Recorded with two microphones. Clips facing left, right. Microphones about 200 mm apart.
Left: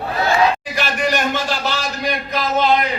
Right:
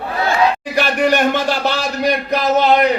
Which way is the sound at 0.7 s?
60° right (ahead or behind).